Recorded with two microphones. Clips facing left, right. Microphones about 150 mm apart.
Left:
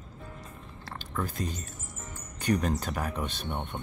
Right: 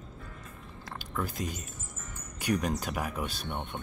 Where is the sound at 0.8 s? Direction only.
5° right (ahead or behind).